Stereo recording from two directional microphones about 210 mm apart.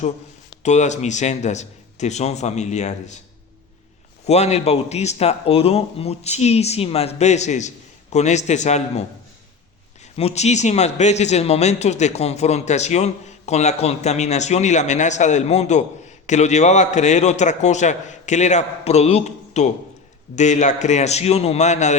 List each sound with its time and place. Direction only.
0.6 s a man's voice: 35° left (ahead or behind)
4.3 s a man's voice: 30° left (ahead or behind)
10.2 s a man's voice: 30° left (ahead or behind)